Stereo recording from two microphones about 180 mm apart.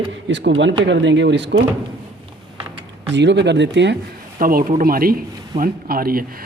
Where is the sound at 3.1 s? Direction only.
75° right (ahead or behind).